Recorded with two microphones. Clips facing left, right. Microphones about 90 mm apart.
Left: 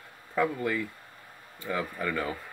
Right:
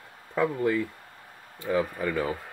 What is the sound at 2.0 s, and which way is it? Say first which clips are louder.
Speech: right 3 dB; 20° right (ahead or behind).